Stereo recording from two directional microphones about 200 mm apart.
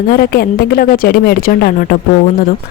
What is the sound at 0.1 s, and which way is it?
Speech, 50° left (ahead or behind).